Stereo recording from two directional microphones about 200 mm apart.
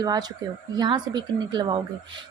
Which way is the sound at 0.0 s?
20° right (ahead or behind).